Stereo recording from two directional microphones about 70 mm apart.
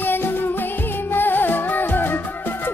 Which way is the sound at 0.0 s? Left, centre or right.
Left.